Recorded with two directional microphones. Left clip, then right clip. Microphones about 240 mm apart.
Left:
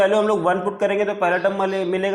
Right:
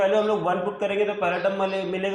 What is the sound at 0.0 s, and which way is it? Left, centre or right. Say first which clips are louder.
A man's voice: left 4 dB; left.